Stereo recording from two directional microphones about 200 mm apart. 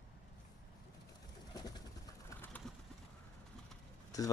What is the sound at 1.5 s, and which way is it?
Bird, 20° left (ahead or behind).